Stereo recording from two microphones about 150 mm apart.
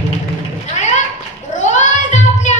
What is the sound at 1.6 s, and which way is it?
Child singing, 55° left (ahead or behind).